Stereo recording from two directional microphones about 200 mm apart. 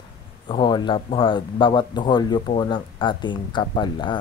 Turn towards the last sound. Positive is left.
turn(degrees=20)  # may be behind; listen again after turning